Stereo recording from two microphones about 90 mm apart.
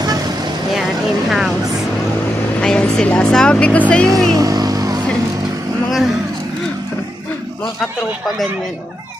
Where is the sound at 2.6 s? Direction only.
10° left (ahead or behind).